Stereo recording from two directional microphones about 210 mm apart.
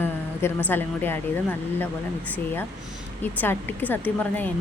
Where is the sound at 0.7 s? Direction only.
10° left (ahead or behind).